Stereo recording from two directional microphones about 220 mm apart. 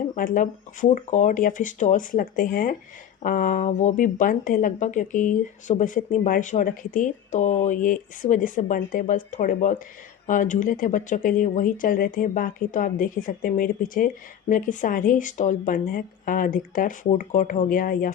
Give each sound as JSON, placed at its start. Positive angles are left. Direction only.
{"t": 0.2, "sound": "speech", "side_deg": 35}